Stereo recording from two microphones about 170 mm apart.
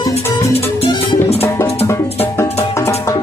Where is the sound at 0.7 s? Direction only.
35° left (ahead or behind).